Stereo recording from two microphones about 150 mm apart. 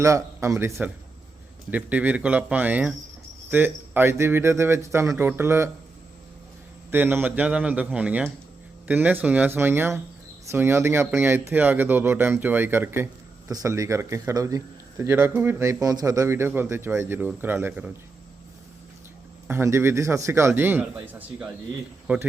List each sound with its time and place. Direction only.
0.0 s a man's voice: 20° right (ahead or behind)
6.9 s a man's voice: 15° right (ahead or behind)
19.5 s a man's voice: 15° right (ahead or behind)